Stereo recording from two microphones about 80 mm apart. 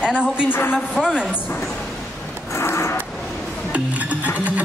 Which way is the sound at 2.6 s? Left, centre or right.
Left.